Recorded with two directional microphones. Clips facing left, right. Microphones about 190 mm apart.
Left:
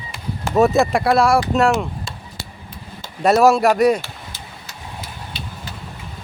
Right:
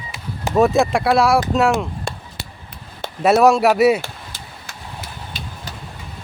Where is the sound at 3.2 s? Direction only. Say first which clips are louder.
Even; centre (ahead or behind).